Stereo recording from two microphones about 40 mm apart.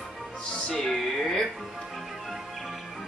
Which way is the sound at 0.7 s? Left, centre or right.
Centre.